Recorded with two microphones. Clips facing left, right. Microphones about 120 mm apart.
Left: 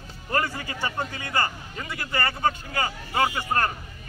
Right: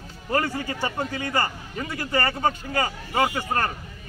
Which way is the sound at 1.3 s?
40° right (ahead or behind).